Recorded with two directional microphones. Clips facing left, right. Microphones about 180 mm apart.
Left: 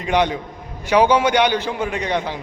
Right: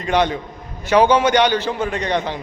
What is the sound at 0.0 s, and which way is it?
A man's voice, 10° left (ahead or behind).